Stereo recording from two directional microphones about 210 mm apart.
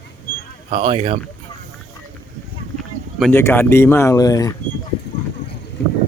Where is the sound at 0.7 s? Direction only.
30° right (ahead or behind).